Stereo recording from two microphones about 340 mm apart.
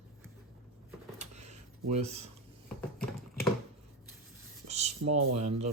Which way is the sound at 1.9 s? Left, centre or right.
Centre.